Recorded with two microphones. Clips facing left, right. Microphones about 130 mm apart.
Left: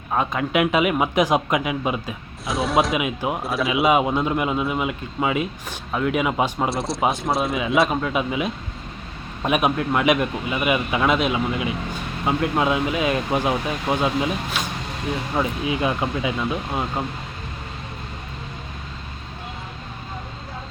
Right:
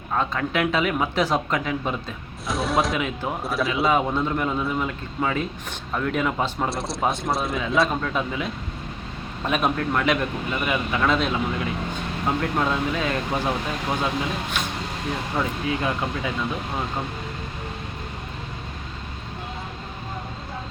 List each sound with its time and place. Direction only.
0.1 s speech: 15° left (ahead or behind)
3.0 s speech: 10° left (ahead or behind)
3.4 s speech: centre (ahead or behind)
3.8 s speech: 10° left (ahead or behind)
6.7 s speech: centre (ahead or behind)
15.4 s speech: 15° left (ahead or behind)